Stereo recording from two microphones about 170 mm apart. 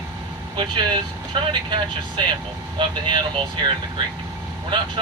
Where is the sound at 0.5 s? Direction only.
25° right (ahead or behind).